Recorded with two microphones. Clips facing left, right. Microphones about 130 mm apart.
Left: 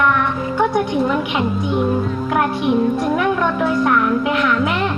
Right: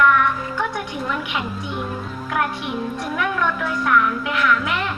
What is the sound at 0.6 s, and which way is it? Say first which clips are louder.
Music: left 12 dB; 30° left (ahead or behind).